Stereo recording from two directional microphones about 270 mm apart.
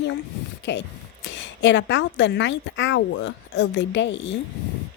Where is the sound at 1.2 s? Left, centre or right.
Left.